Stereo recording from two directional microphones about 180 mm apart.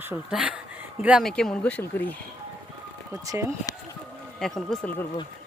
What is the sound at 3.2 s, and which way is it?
Speech, 15° right (ahead or behind).